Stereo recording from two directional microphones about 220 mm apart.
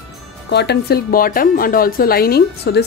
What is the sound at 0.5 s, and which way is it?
Speech, 50° left (ahead or behind).